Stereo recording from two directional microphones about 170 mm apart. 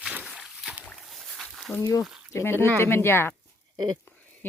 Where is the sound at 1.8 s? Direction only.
20° left (ahead or behind).